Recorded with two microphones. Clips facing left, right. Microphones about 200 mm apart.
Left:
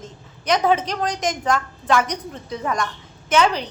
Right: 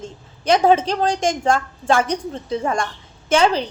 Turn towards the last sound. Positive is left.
turn(degrees=-30)  # may be behind; listen again after turning